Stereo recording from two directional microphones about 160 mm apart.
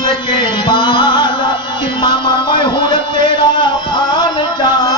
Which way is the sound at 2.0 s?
30° left (ahead or behind).